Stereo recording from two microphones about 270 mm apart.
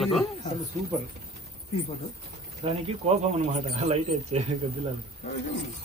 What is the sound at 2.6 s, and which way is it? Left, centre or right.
Speech, right.